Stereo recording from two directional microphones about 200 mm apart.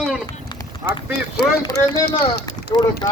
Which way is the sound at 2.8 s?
20° left (ahead or behind).